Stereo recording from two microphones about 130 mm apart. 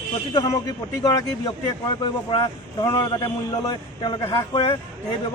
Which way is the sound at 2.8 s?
35° left (ahead or behind).